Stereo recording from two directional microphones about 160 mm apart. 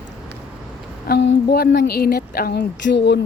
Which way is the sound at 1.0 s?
85° left.